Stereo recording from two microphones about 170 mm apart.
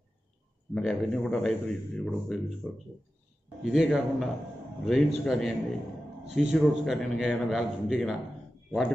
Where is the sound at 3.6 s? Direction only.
Centre (ahead or behind).